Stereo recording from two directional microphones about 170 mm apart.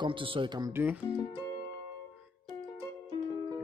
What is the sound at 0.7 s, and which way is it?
Speech, 10° right (ahead or behind).